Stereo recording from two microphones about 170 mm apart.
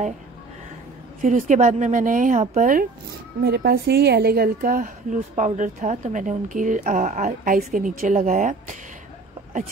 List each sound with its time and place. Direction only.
1.2 s a woman's voice: 50° right (ahead or behind)
3.4 s speech: 70° right (ahead or behind); by 5.2 s 55° right (ahead or behind)
5.3 s a woman's voice: 45° right (ahead or behind)